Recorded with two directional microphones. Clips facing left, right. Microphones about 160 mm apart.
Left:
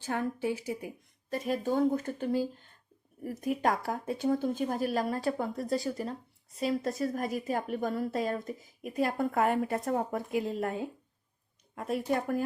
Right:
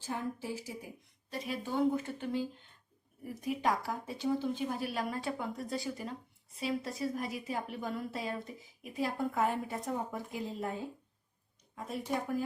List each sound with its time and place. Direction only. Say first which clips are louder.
0.0 s speech: left 6 dB; 70° left (ahead or behind)
1.3 s a woman's voice: left 7 dB; 45° left (ahead or behind); by 12.4 s 60° left (ahead or behind)